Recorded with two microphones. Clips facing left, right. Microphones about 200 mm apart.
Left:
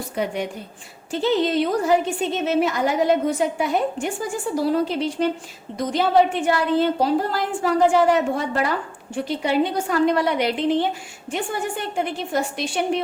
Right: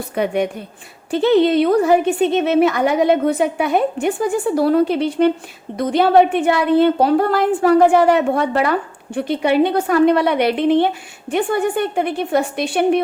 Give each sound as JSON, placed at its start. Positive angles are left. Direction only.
{"t": 0.2, "sound": "a woman's voice", "side_deg": -65}